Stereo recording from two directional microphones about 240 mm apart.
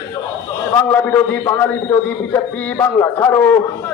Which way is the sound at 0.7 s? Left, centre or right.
Centre.